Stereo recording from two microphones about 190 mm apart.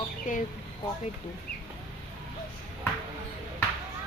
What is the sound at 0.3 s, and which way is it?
Speech, 45° left (ahead or behind).